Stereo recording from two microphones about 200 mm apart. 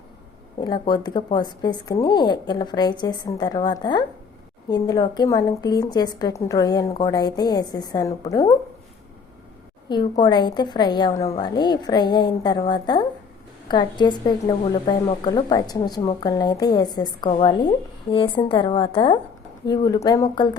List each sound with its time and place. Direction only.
0.6 s a woman's voice: 20° left (ahead or behind)
9.9 s a woman's voice: 20° left (ahead or behind)